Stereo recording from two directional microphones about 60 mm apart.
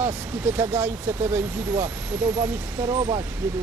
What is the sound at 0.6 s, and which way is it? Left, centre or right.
Speech, right.